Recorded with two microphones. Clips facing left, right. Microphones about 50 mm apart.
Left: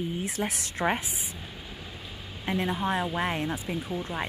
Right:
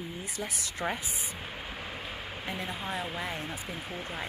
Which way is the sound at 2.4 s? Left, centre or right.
Left.